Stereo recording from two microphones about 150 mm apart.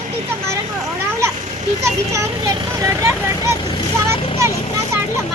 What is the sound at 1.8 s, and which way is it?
A child's voice, 20° right (ahead or behind).